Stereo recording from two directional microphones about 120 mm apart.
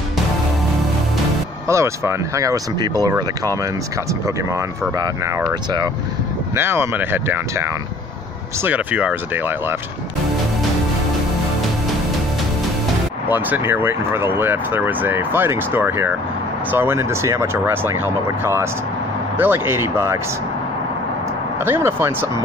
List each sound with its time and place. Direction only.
1.7 s speech: 25° right (ahead or behind)
8.6 s speech: 10° right (ahead or behind)
13.3 s speech: 15° right (ahead or behind)
21.6 s speech: 20° right (ahead or behind)